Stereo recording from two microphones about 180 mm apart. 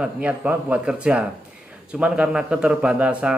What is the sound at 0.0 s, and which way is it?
A man's voice, 5° right (ahead or behind).